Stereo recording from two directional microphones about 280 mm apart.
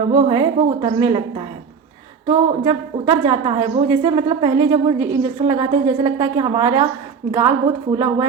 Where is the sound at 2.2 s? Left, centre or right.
Centre.